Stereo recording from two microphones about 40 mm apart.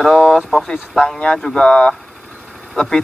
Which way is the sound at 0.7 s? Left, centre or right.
Centre.